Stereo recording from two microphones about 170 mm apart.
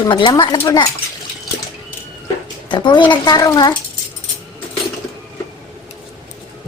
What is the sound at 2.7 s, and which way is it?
Speech, 25° left (ahead or behind).